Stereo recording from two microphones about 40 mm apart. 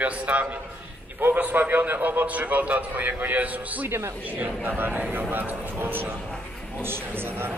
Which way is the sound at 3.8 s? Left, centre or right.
Right.